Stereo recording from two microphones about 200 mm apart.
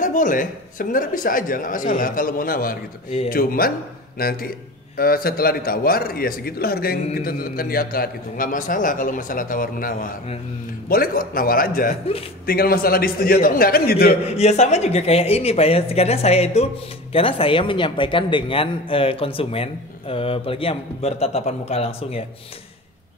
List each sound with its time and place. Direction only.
0.0 s a man's voice: 40° left (ahead or behind)
14.3 s a woman's voice: 35° left (ahead or behind)